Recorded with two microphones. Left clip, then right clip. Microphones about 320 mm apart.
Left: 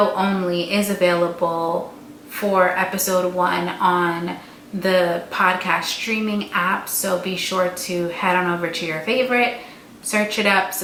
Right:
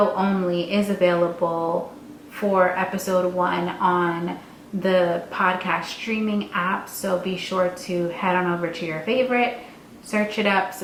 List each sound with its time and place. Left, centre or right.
0.2 s speech: centre
1.4 s speech: centre
2.3 s speech: centre